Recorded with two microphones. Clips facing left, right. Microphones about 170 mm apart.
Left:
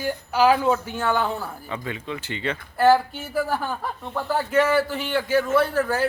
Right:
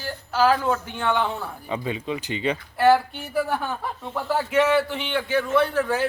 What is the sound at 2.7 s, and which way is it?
Speech, centre (ahead or behind).